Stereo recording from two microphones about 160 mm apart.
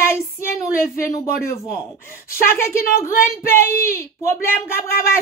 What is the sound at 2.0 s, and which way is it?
Speech, 15° left (ahead or behind).